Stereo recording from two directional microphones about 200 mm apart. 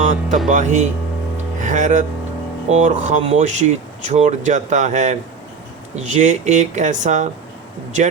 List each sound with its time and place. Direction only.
0.0 s speech: 35° right (ahead or behind)